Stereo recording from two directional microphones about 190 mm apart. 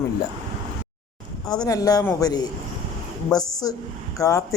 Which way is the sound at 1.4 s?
20° left (ahead or behind).